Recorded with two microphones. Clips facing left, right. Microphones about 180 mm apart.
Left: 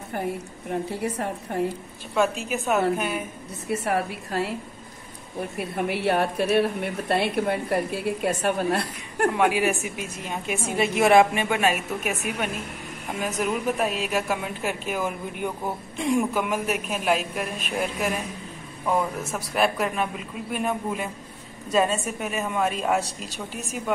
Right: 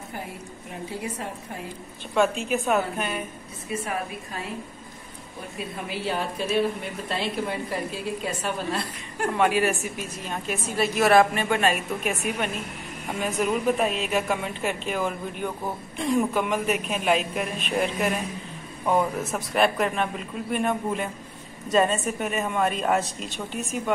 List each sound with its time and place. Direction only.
0.1 s a woman's voice: 60° left (ahead or behind)
2.1 s speech: centre (ahead or behind)
3.6 s a woman's voice: 75° left (ahead or behind)
5.6 s a woman's voice: 65° left (ahead or behind)
9.3 s a woman's voice: 10° left (ahead or behind)